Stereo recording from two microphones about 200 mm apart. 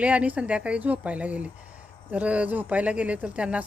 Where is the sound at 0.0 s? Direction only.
5° right (ahead or behind).